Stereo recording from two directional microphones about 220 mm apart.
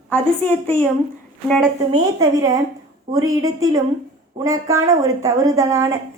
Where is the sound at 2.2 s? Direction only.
15° right (ahead or behind).